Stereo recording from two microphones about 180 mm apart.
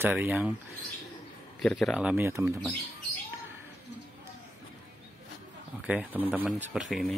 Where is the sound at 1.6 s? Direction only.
Centre (ahead or behind); by 2.5 s 15° right (ahead or behind).